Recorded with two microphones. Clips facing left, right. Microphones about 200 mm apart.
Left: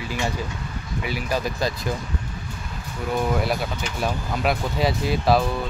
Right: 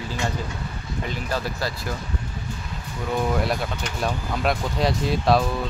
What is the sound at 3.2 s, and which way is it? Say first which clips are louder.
Speech: even; centre (ahead or behind).